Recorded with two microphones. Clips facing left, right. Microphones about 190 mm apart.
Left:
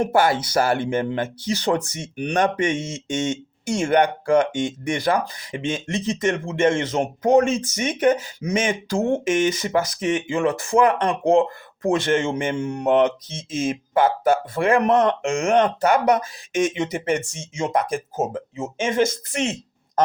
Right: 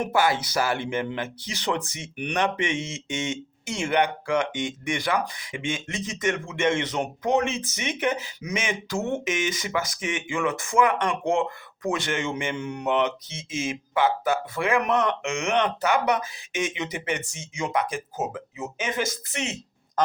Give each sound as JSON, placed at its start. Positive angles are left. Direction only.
{"t": 0.1, "sound": "speech", "side_deg": 50}
{"t": 12.9, "sound": "speech", "side_deg": 45}
{"t": 14.8, "sound": "speech", "side_deg": 35}
{"t": 15.3, "sound": "speech", "side_deg": 45}
{"t": 17.4, "sound": "speech", "side_deg": 30}
{"t": 17.7, "sound": "speech", "side_deg": 50}